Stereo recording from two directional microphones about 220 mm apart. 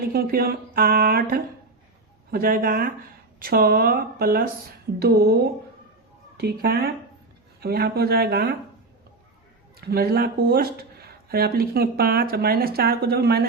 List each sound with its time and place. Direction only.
0.0 s speech: 45° right (ahead or behind)
6.3 s speech: 45° right (ahead or behind)
9.8 s speech: 45° right (ahead or behind)